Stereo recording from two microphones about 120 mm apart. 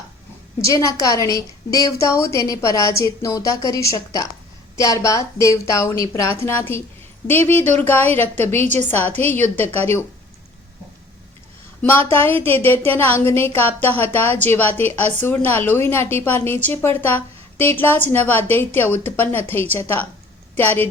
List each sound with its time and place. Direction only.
0.6 s a woman's voice: 25° left (ahead or behind)
11.8 s a woman's voice: 15° left (ahead or behind)